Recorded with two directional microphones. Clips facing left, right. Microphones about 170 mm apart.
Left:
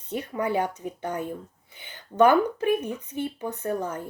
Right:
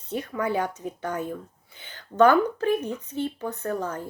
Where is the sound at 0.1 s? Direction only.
15° left (ahead or behind).